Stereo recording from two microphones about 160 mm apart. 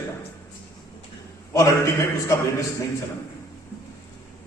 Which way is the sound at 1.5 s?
20° left (ahead or behind).